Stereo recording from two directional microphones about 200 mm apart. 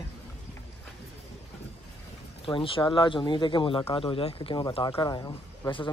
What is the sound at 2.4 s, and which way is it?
Speech, 25° left (ahead or behind).